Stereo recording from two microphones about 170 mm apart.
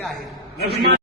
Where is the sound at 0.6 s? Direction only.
70° right (ahead or behind).